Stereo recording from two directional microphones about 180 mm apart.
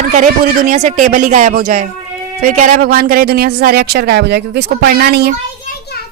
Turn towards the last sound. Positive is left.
turn(degrees=-60)  # may be behind; listen again after turning